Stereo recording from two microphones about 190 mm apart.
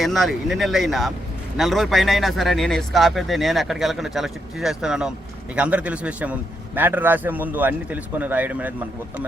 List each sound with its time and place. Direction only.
0.0 s a man's voice: centre (ahead or behind)